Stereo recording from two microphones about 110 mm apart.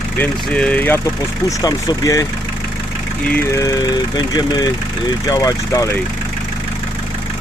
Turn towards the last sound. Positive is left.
turn(degrees=30)  # may be behind; listen again after turning